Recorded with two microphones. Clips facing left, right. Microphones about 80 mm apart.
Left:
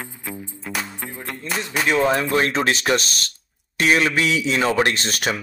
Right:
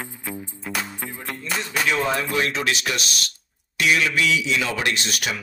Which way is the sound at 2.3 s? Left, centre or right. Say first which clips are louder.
Left 4 dB; left.